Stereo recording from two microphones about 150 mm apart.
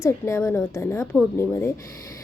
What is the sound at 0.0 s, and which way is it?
A woman's voice, 20° left (ahead or behind).